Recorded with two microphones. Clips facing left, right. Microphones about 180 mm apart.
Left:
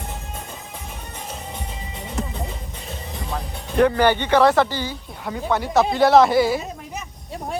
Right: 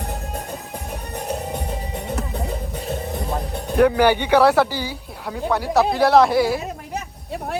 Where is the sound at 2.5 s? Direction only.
40° right (ahead or behind).